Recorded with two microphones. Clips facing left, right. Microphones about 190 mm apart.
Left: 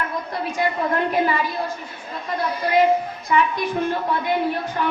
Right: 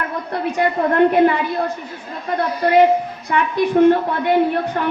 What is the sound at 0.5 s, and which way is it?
Speech, 65° right (ahead or behind).